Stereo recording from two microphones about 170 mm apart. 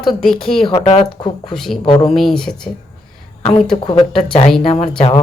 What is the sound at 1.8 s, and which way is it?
Speech, 25° left (ahead or behind).